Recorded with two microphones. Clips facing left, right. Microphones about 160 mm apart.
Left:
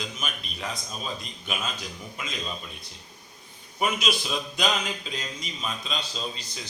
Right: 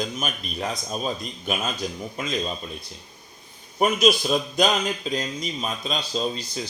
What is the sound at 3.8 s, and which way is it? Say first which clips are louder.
Speech: right 8 dB; 45° right (ahead or behind).